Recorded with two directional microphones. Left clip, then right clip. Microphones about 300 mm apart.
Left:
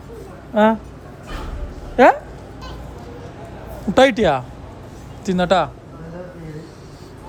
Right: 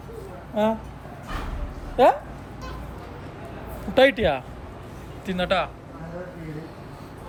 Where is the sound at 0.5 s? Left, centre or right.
Left.